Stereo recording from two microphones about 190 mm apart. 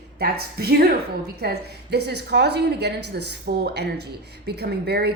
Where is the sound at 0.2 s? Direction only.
55° right (ahead or behind).